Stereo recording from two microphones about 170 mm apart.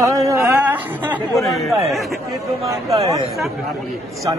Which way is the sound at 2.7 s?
20° right (ahead or behind).